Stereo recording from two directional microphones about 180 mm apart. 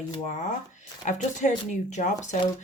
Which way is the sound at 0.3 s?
45° left (ahead or behind).